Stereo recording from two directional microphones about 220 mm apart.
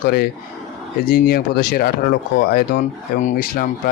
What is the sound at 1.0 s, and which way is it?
Speech, 45° left (ahead or behind).